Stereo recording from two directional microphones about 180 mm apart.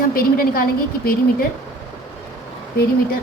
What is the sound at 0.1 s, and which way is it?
Speech, 55° left (ahead or behind).